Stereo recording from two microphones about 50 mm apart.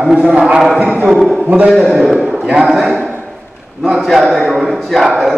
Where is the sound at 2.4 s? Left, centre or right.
Centre.